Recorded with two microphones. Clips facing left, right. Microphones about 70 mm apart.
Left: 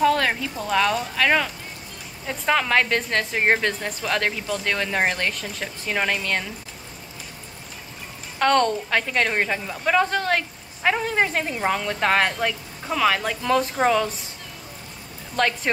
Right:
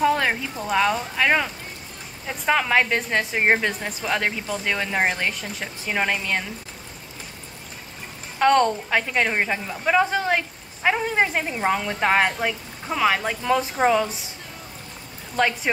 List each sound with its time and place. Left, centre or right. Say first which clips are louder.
0.0 s a woman's voice: left 1 dB; centre
8.4 s a woman's voice: right 1 dB; centre
15.3 s a woman's voice: right 1 dB; centre